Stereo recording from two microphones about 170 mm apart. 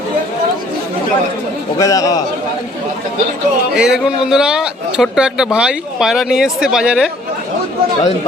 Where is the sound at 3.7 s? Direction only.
5° right (ahead or behind).